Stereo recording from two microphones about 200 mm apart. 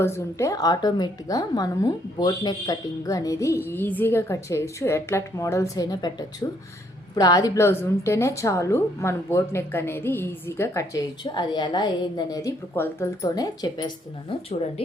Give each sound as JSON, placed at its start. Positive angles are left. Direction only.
{"t": 0.0, "sound": "a woman's voice", "side_deg": 15}